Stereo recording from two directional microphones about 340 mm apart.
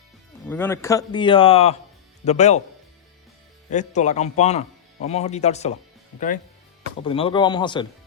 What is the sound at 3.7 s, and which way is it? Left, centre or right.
A man's voice, left.